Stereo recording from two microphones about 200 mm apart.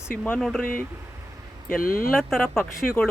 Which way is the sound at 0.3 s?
Centre (ahead or behind).